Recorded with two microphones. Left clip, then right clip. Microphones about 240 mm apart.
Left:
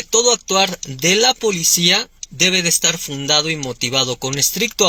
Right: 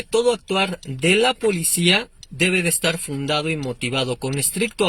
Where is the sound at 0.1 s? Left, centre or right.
Centre.